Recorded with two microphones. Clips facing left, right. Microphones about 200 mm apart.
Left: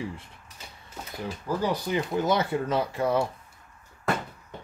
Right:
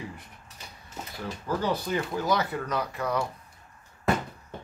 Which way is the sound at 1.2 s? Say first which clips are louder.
Left 1 dB; 15° left (ahead or behind).